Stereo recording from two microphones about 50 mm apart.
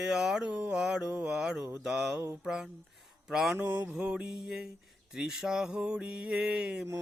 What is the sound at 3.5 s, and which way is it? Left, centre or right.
Mantra, right.